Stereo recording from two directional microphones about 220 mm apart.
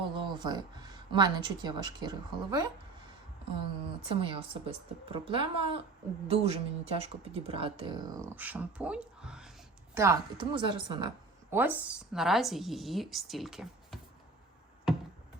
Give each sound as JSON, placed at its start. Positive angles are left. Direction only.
{"t": 0.0, "sound": "speech", "side_deg": -20}
{"t": 4.0, "sound": "speech", "side_deg": -25}
{"t": 11.5, "sound": "speech", "side_deg": -10}